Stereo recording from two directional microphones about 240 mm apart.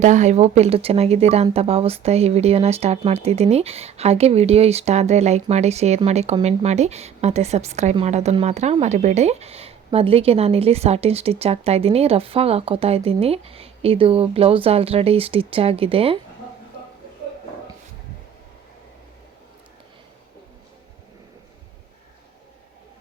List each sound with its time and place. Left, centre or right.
0.0 s speech: right